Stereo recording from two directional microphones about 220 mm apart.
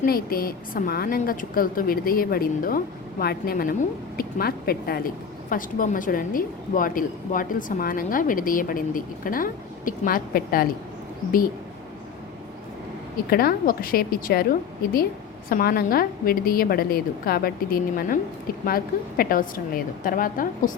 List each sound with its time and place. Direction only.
0.0 s a woman's voice: 40° left (ahead or behind)
13.3 s a woman's voice: 40° left (ahead or behind)
15.4 s a woman's voice: 40° left (ahead or behind)